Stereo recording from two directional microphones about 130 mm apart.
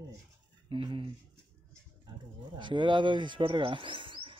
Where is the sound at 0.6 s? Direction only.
45° right (ahead or behind).